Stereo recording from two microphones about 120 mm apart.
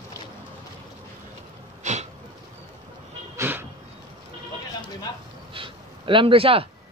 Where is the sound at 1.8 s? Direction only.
80° right.